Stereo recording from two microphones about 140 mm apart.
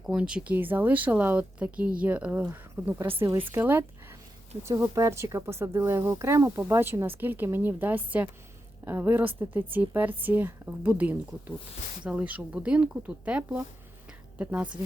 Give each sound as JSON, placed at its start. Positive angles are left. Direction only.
{"t": 0.0, "sound": "a woman's voice", "side_deg": -5}